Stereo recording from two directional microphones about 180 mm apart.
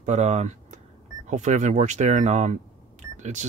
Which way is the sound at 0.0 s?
40° right (ahead or behind).